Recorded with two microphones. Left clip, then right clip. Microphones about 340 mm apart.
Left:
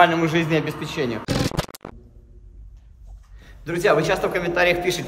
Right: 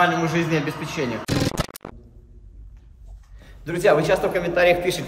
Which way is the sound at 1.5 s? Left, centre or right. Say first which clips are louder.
Even; centre.